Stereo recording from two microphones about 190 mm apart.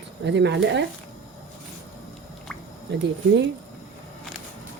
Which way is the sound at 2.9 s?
65° right (ahead or behind).